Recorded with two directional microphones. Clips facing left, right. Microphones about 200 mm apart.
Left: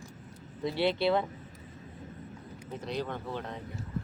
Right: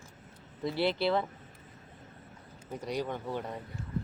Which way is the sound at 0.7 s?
25° left (ahead or behind).